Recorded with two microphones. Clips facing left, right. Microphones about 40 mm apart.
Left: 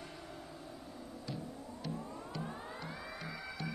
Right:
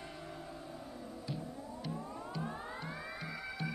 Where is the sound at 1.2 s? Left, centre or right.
Centre.